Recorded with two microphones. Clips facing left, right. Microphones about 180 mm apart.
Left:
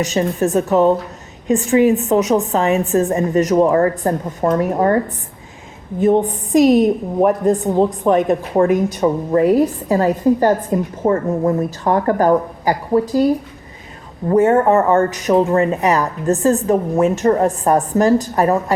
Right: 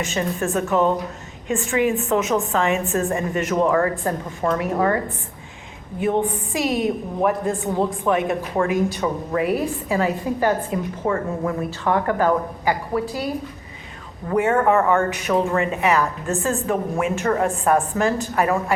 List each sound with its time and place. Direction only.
0.0 s speech: 40° left (ahead or behind)
6.0 s speech: 40° left (ahead or behind)
14.3 s speech: 35° left (ahead or behind)